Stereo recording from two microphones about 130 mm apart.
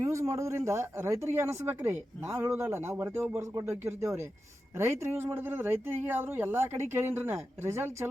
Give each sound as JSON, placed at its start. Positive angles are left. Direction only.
{"t": 0.0, "sound": "speech", "side_deg": -20}